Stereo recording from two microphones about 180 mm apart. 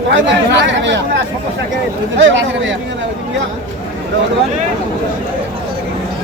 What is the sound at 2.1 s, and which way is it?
Speech, 90° right.